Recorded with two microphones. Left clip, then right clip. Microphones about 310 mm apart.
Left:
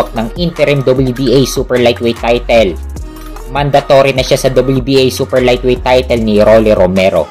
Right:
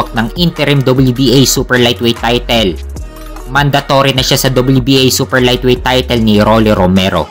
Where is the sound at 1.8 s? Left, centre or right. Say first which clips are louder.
Left 3 dB; right.